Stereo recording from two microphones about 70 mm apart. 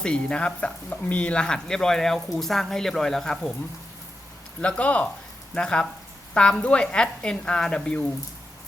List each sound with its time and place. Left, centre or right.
0.0 s speech: centre
4.6 s speech: centre